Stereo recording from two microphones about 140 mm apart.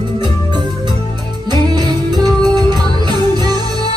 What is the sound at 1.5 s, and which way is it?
Music, 30° right (ahead or behind).